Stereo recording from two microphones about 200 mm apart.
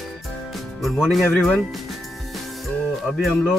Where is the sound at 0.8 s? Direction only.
Centre (ahead or behind).